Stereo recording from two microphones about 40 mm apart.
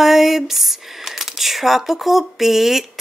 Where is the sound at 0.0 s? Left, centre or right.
Centre.